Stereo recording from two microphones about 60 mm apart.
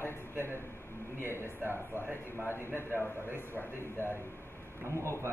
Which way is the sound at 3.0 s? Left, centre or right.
Left.